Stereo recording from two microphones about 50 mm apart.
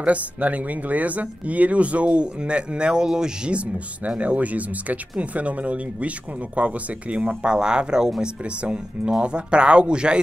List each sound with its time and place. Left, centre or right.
0.0 s speech: right
4.2 s speech: right